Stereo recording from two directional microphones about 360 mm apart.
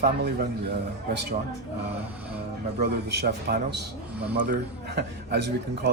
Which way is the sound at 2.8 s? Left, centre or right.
Right.